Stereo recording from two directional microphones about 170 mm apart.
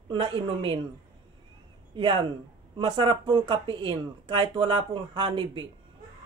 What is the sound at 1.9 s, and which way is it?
Speech, 25° right (ahead or behind).